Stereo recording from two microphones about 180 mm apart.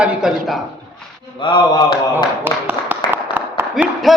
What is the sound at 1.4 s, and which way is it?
Speech, 25° left (ahead or behind).